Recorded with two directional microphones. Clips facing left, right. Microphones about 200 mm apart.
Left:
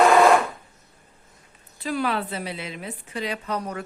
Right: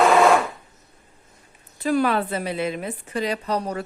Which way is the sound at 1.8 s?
50° right (ahead or behind).